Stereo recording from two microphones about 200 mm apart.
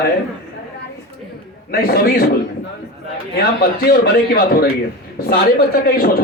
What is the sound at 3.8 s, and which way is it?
Speech, 50° left (ahead or behind).